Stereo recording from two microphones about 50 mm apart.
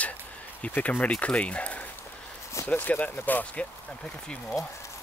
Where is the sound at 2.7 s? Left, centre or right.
Left.